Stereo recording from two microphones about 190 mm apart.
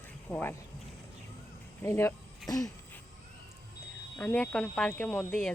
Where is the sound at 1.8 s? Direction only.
15° left (ahead or behind).